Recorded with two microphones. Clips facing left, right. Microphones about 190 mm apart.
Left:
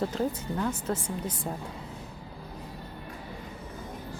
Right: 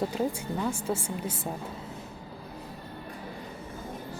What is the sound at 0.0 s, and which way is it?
Speech, 10° right (ahead or behind).